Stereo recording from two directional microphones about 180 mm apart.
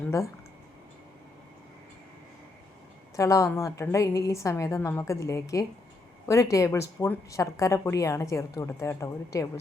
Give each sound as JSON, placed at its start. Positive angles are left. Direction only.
{"t": 3.2, "sound": "a woman's voice", "side_deg": 15}